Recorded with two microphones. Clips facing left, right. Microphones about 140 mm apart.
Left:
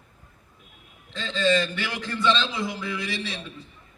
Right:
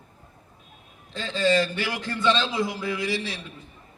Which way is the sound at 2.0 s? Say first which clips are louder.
Even; 25° right (ahead or behind).